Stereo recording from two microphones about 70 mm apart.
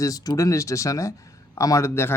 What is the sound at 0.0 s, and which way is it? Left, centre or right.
Speech, left.